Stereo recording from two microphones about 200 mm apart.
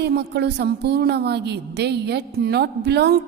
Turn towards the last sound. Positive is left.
turn(degrees=-55)  # may be behind; listen again after turning